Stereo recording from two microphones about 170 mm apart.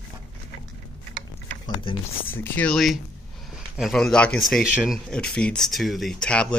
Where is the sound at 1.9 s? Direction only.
30° left (ahead or behind).